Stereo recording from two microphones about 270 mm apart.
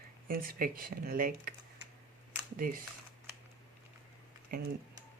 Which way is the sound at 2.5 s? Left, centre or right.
Right.